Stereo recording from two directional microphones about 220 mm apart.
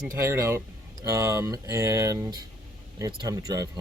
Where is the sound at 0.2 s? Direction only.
10° right (ahead or behind).